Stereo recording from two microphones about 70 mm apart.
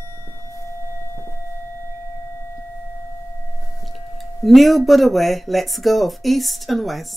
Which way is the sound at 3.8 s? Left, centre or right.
Centre.